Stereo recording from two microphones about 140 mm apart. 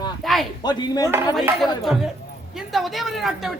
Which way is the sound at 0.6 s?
30° left (ahead or behind).